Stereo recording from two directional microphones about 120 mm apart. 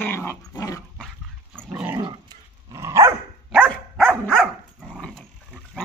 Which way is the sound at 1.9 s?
30° right (ahead or behind).